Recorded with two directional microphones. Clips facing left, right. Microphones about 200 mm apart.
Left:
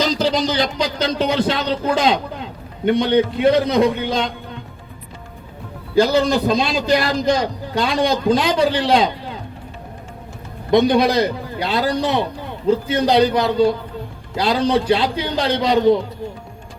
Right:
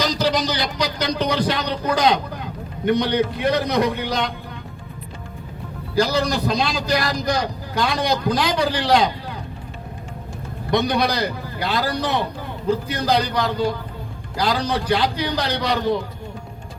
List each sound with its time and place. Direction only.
0.0 s speech: 25° left (ahead or behind)
5.9 s a man's voice: 25° left (ahead or behind)
10.7 s a man's voice: 25° left (ahead or behind)